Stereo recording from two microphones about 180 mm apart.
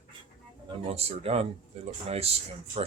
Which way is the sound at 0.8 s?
35° right (ahead or behind).